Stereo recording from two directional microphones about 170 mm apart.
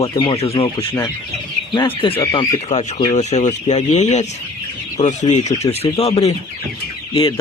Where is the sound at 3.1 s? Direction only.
45° left (ahead or behind).